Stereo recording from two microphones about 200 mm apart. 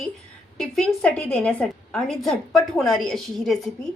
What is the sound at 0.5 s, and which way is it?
A woman's voice, centre (ahead or behind).